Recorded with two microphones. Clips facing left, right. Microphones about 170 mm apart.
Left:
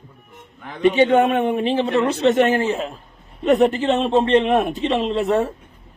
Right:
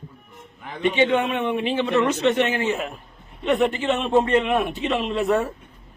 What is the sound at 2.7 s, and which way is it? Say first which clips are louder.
Speech: left 2 dB; 30° left (ahead or behind).